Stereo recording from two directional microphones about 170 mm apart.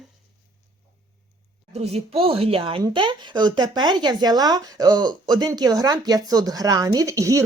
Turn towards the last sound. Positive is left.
turn(degrees=-20)  # may be behind; listen again after turning